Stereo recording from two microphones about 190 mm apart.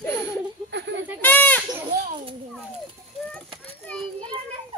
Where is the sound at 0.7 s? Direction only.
65° right (ahead or behind).